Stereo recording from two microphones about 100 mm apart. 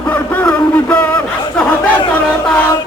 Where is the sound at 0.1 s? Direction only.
15° left (ahead or behind).